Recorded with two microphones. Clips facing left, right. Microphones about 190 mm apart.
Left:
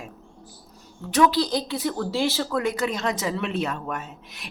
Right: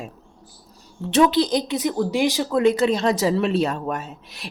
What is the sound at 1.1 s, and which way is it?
Speech, 20° right (ahead or behind).